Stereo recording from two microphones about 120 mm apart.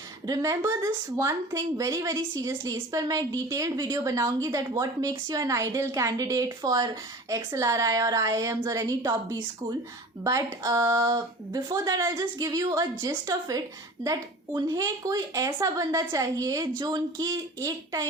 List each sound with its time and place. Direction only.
0.3 s a woman's voice: 25° right (ahead or behind)